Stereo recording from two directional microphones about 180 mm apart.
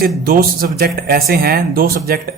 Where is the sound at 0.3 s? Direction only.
55° right (ahead or behind).